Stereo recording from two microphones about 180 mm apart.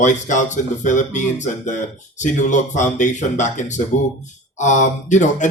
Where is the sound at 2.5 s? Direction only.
45° left (ahead or behind).